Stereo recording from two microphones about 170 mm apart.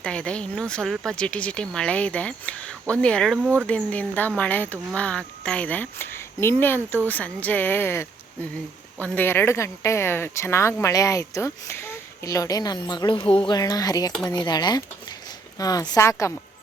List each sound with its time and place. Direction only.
0.0 s speech: 5° left (ahead or behind)
3.4 s speech: 10° right (ahead or behind)
3.7 s speech: 10° left (ahead or behind); by 13.2 s 25° left (ahead or behind)
13.2 s speech: 10° left (ahead or behind)
13.5 s speech: 20° left (ahead or behind)